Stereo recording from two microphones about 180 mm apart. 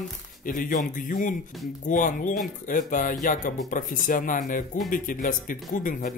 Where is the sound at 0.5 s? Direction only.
50° left (ahead or behind).